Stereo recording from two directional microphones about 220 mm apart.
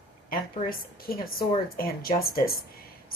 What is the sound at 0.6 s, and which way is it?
A woman's voice, 40° left (ahead or behind).